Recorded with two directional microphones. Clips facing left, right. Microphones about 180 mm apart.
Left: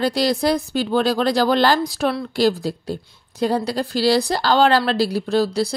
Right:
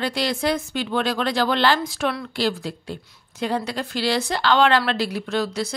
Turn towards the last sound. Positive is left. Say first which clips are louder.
# left 5 dB
turn(degrees=35)  # may be behind; listen again after turning